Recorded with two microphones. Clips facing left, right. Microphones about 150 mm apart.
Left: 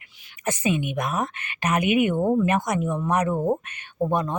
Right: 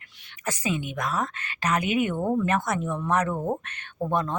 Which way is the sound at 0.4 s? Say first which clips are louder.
Left 4 dB; 20° left (ahead or behind).